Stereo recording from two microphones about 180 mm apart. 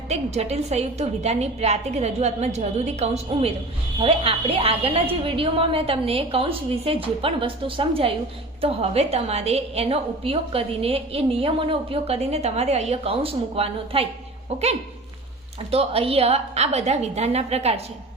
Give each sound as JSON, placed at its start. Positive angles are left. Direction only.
{"t": 0.1, "sound": "a woman's voice", "side_deg": -35}
{"t": 15.7, "sound": "a woman's voice", "side_deg": -35}